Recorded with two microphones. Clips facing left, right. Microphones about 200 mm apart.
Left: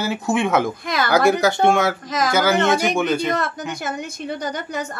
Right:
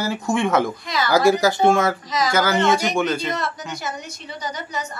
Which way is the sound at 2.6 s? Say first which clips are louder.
Left 1 dB; 55° left (ahead or behind).